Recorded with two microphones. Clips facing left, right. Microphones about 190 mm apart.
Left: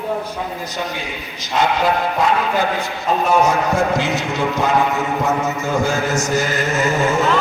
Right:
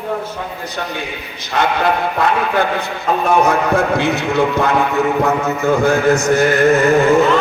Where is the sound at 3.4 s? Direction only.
60° right (ahead or behind).